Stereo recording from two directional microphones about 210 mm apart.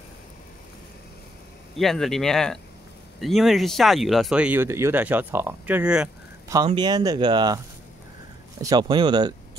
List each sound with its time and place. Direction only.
1.8 s speech: centre (ahead or behind)
6.5 s speech: 20° right (ahead or behind)